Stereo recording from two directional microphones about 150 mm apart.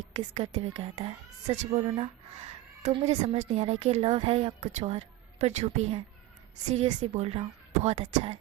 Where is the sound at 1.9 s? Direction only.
40° right (ahead or behind).